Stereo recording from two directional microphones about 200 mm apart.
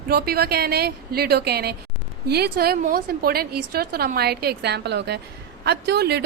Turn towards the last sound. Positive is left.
turn(degrees=-55)  # may be behind; listen again after turning